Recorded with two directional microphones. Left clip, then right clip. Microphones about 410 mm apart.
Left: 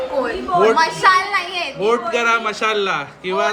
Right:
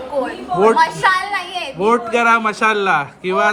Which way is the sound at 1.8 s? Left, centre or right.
Centre.